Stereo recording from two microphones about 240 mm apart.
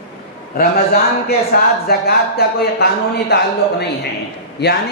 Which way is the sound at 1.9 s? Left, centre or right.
Left.